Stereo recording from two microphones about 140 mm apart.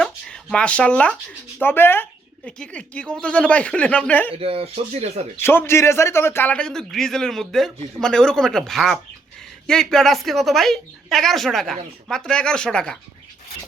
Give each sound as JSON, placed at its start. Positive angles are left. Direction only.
{"t": 0.0, "sound": "a sound", "side_deg": 5}
{"t": 1.5, "sound": "speech", "side_deg": 15}
{"t": 4.3, "sound": "speech", "side_deg": -45}
{"t": 5.4, "sound": "a woman's voice", "side_deg": 15}